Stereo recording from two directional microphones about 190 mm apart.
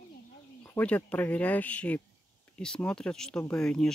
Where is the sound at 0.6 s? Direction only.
10° left (ahead or behind).